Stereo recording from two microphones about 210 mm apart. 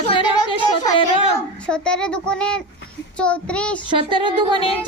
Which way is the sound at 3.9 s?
20° right (ahead or behind).